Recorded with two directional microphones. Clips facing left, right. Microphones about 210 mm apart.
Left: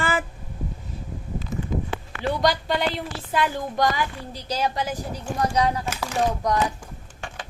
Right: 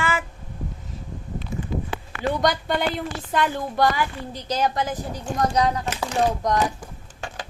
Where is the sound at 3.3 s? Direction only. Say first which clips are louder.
Right 1 dB; 10° left (ahead or behind).